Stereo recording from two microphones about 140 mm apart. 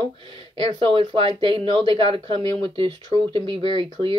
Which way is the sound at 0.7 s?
40° right (ahead or behind).